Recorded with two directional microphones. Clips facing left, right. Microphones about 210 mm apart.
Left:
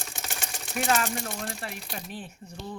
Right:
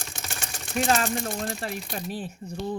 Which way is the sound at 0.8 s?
35° right (ahead or behind).